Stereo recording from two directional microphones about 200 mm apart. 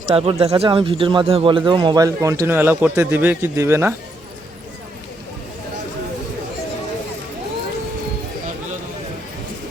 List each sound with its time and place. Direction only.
0.1 s speech: 30° right (ahead or behind); by 3.9 s 15° right (ahead or behind)